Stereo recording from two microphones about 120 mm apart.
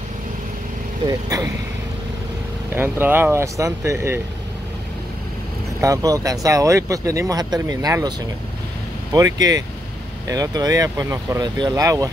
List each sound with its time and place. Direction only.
1.0 s speech: 30° right (ahead or behind)
2.7 s speech: 15° right (ahead or behind)
5.8 s speech: 30° right (ahead or behind)
9.1 s speech: 30° right (ahead or behind)